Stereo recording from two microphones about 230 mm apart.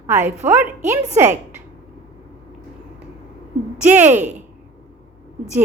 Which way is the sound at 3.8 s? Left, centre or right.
Centre.